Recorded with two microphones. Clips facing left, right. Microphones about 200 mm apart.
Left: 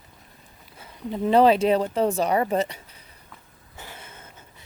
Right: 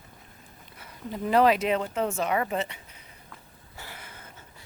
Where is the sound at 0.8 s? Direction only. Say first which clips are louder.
Left 6 dB; 25° left (ahead or behind).